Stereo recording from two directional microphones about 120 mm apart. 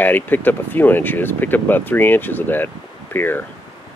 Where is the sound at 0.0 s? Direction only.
15° left (ahead or behind).